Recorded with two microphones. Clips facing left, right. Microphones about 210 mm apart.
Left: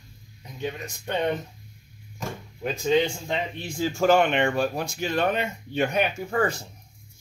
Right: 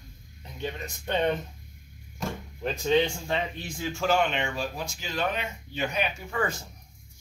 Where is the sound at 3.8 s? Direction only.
50° left (ahead or behind).